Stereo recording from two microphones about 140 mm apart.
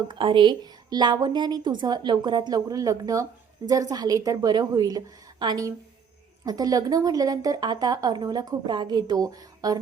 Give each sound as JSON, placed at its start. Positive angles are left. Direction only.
{"t": 0.1, "sound": "a woman's voice", "side_deg": -35}